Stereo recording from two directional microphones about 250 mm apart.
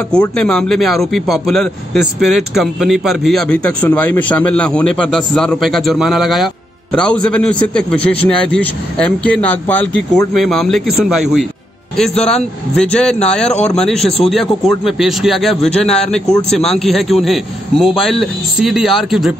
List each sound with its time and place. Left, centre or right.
0.1 s a man's voice: centre
13.5 s speech: left
13.7 s a man's voice: centre